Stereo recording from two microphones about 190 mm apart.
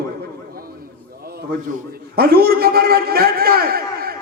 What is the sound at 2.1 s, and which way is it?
A man's voice, 55° right (ahead or behind).